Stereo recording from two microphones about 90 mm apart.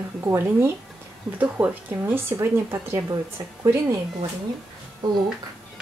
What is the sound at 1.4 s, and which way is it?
Speech, 20° right (ahead or behind).